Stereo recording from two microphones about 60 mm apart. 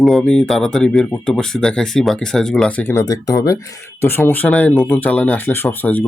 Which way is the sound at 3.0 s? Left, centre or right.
Left.